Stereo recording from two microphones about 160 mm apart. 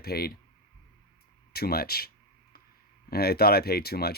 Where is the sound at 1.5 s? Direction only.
75° left (ahead or behind).